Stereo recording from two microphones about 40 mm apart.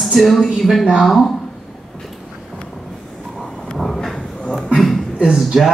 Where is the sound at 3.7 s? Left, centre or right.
Centre.